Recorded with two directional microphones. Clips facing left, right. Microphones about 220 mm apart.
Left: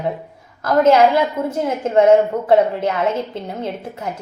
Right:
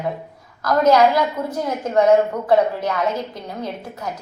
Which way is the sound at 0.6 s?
25° left (ahead or behind).